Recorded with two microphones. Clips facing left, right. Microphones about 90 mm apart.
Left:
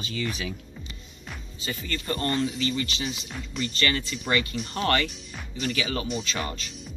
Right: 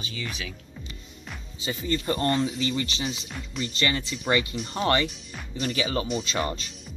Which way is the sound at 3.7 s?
25° right (ahead or behind).